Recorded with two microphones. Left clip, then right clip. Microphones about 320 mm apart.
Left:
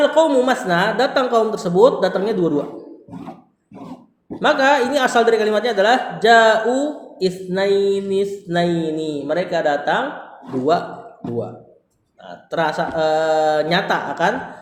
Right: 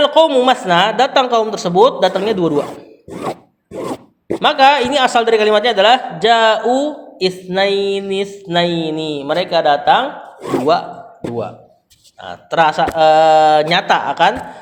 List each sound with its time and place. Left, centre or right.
0.0 s mantra: right
4.4 s mantra: right
12.2 s mantra: right